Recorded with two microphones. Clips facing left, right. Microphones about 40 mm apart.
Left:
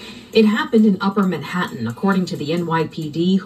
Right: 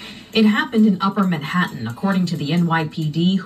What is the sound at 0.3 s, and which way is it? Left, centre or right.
Speech, right.